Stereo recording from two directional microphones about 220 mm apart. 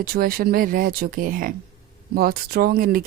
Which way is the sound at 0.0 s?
45° right (ahead or behind).